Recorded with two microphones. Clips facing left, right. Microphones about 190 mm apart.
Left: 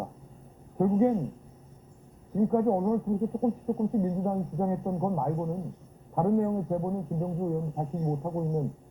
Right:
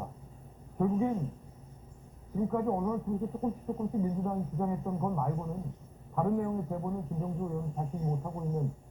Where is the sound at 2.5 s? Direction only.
30° left (ahead or behind).